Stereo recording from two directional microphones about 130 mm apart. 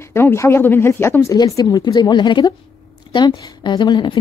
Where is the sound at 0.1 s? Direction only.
20° left (ahead or behind).